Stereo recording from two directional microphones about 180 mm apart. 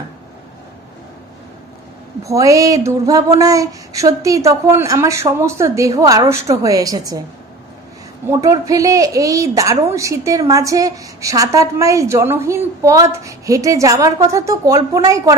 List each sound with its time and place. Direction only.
2.2 s a woman's voice: 20° right (ahead or behind)
8.3 s a woman's voice: 15° right (ahead or behind)